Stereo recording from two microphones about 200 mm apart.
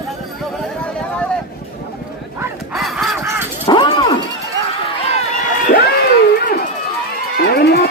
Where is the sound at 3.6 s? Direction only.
25° left (ahead or behind).